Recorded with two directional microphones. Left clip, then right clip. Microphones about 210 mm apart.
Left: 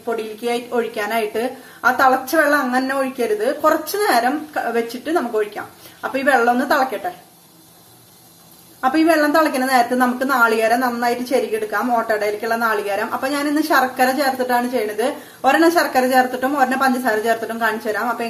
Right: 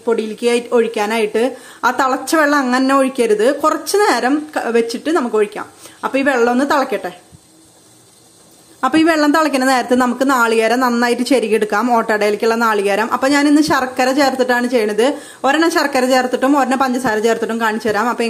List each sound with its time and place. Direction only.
0.0 s a woman's voice: 40° right (ahead or behind)
8.8 s a woman's voice: 40° right (ahead or behind)